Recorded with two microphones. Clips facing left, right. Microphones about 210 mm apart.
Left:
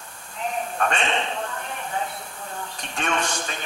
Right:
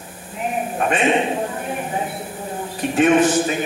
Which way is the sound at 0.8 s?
15° right (ahead or behind).